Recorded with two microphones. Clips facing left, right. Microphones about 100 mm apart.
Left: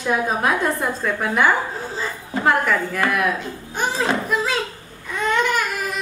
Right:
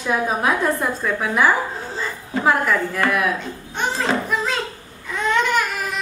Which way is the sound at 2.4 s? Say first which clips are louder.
Even; centre (ahead or behind).